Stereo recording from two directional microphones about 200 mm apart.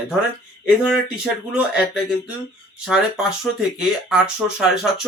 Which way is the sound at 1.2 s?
5° right (ahead or behind).